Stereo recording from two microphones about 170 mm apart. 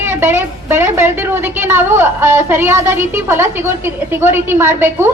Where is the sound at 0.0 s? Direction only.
10° right (ahead or behind).